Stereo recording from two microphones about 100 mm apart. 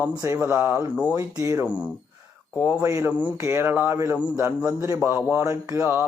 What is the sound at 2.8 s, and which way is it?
Speech, 30° right (ahead or behind).